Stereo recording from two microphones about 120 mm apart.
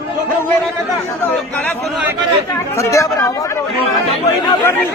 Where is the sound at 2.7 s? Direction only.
25° left (ahead or behind).